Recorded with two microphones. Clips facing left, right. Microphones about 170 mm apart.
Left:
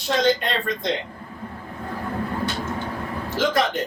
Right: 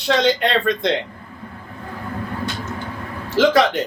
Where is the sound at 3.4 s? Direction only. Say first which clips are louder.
Right 7 dB; 75° right (ahead or behind).